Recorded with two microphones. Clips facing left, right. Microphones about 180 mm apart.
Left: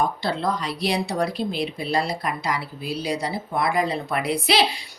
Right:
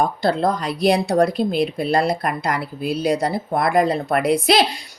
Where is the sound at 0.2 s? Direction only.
45° right (ahead or behind).